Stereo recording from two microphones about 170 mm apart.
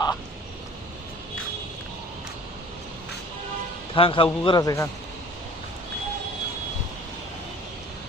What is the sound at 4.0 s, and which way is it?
Speech, 30° left (ahead or behind).